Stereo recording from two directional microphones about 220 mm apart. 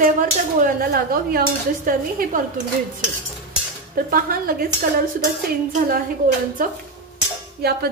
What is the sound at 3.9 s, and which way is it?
Speech, 40° right (ahead or behind).